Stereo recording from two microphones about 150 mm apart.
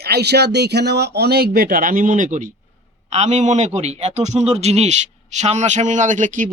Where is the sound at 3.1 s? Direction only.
50° right (ahead or behind).